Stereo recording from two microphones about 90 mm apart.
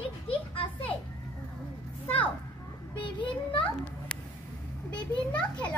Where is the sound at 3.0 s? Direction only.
65° left (ahead or behind).